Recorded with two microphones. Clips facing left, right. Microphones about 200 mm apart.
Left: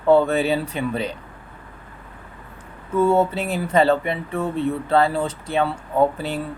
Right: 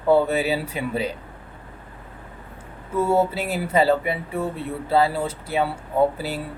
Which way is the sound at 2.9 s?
10° right (ahead or behind).